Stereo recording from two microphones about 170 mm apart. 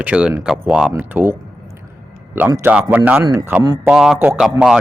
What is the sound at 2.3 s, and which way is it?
A man's voice, 10° right (ahead or behind).